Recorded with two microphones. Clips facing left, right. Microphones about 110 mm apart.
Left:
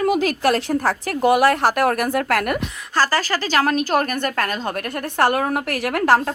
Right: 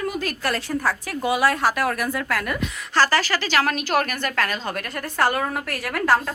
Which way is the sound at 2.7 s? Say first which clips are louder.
Even; 20° left (ahead or behind).